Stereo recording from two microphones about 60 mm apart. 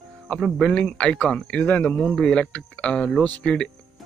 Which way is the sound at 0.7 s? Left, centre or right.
Centre.